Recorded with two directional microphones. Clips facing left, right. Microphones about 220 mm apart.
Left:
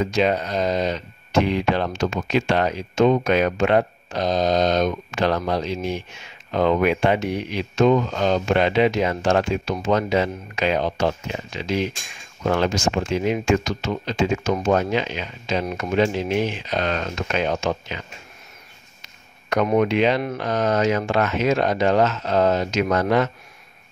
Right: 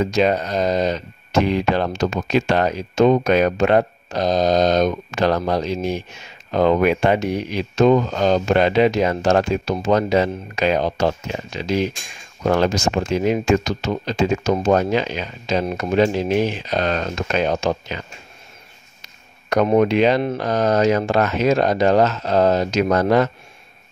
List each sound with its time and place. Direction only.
0.0 s speech: 40° right (ahead or behind)
19.5 s speech: 35° right (ahead or behind)